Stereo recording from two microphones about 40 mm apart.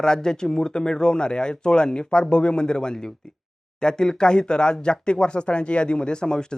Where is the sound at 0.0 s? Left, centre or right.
Centre.